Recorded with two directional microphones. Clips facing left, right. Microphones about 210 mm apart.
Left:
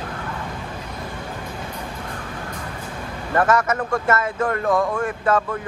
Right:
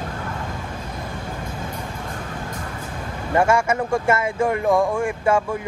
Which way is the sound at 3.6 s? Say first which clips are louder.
Right 2 dB; 10° right (ahead or behind).